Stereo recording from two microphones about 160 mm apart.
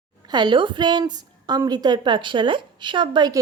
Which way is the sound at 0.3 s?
25° right (ahead or behind).